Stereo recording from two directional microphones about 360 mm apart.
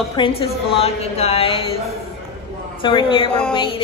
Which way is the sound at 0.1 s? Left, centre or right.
Centre.